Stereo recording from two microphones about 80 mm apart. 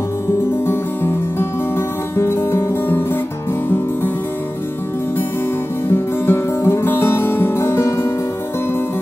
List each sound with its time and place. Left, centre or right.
0.7 s music: left
5.9 s music: left